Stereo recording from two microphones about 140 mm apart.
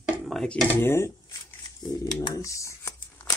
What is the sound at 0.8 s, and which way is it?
Shuffling cards, 20° left (ahead or behind).